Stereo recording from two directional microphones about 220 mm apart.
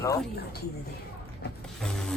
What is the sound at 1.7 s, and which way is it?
Speech, 5° left (ahead or behind).